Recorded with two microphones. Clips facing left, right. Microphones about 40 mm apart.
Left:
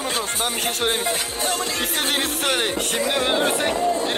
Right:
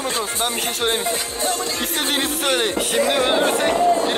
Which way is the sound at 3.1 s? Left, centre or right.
Centre.